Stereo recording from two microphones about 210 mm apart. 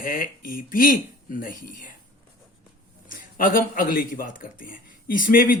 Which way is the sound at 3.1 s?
40° left (ahead or behind).